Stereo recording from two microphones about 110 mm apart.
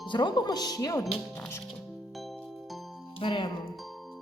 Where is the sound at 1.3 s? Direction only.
20° left (ahead or behind).